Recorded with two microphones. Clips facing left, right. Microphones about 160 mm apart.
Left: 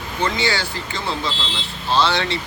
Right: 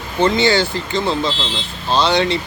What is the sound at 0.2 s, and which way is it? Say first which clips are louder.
Speech: right 8 dB; 25° right (ahead or behind).